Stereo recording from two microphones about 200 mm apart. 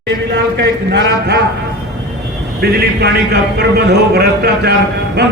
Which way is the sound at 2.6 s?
50° right (ahead or behind).